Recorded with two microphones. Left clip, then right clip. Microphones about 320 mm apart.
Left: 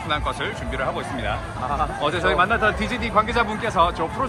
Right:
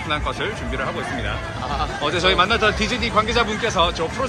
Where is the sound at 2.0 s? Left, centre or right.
Centre.